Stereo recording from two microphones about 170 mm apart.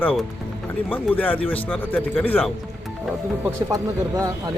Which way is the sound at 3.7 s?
20° right (ahead or behind).